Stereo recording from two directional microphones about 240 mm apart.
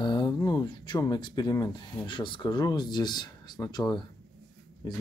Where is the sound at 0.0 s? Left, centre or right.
Centre.